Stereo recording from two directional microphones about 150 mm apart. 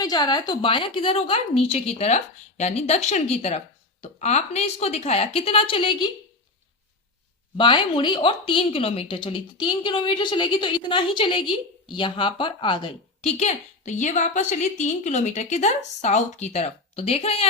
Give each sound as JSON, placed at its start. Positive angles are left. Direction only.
{"t": 0.0, "sound": "a woman's voice", "side_deg": 25}
{"t": 7.5, "sound": "speech", "side_deg": 30}
{"t": 13.3, "sound": "a woman's voice", "side_deg": 50}